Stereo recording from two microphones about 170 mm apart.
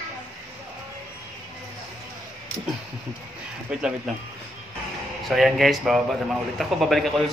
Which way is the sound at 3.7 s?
5° right (ahead or behind).